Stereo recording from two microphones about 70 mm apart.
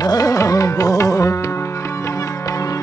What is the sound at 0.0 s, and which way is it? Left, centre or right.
Music, left.